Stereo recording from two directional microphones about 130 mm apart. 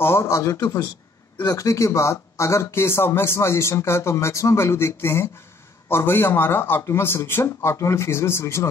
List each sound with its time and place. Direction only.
0.0 s speech: 20° left (ahead or behind)